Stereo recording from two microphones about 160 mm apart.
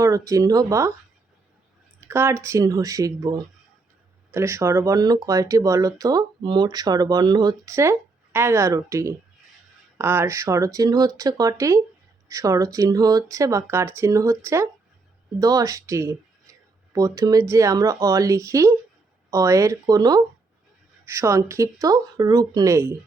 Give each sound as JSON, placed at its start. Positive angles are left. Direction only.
{"t": 0.0, "sound": "speech", "side_deg": -20}
{"t": 2.0, "sound": "speech", "side_deg": -15}